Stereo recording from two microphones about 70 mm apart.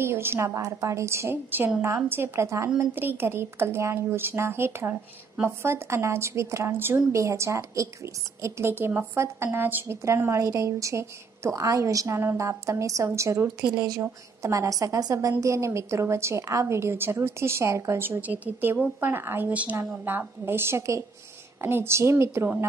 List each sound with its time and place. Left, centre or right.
0.0 s a woman's voice: right
0.6 s a woman's voice: right
2.8 s a woman's voice: right
10.0 s a woman's voice: right
12.2 s a woman's voice: right
15.4 s a woman's voice: right
18.2 s a woman's voice: right
19.5 s a woman's voice: centre
20.1 s a woman's voice: right